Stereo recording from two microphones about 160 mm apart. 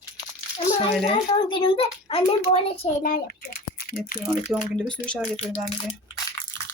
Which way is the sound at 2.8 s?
45° left (ahead or behind).